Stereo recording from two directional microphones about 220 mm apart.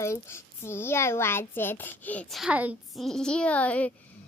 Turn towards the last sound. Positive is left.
turn(degrees=5)  # may be behind; listen again after turning